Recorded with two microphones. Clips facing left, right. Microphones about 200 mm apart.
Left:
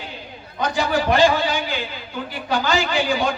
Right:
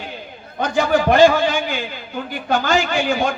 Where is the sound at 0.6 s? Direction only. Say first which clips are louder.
Right 4 dB; 55° right (ahead or behind).